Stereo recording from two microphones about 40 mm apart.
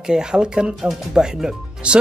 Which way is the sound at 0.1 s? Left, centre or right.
Right.